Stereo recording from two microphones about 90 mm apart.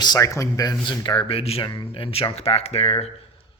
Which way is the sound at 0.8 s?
60° left (ahead or behind).